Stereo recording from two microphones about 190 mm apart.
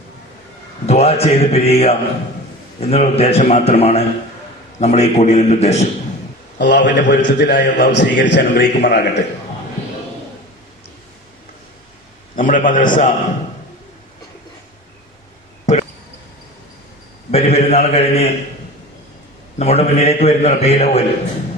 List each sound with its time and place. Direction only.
0.9 s a man's voice: 35° left (ahead or behind)
6.6 s a man's voice: 65° left (ahead or behind)
12.4 s a man's voice: 45° left (ahead or behind)
15.6 s a sound: 40° left (ahead or behind)
17.3 s a man's voice: 35° left (ahead or behind)
19.5 s a man's voice: 35° left (ahead or behind)